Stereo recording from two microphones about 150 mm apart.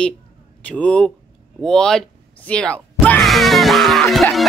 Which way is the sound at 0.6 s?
10° left (ahead or behind).